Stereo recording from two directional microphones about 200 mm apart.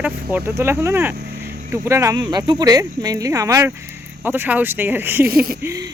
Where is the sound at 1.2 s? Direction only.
50° right (ahead or behind).